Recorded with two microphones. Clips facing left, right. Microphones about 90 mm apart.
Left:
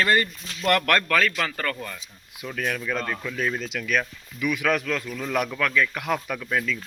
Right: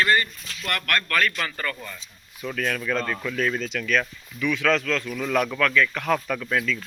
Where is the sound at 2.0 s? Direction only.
15° left (ahead or behind).